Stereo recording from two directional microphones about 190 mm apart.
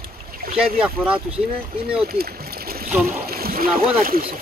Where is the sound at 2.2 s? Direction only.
50° right (ahead or behind).